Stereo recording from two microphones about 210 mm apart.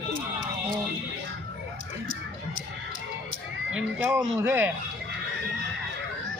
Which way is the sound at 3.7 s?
5° right (ahead or behind).